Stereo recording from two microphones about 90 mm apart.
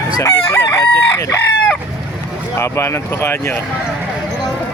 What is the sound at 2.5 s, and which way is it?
Speech, 30° left (ahead or behind).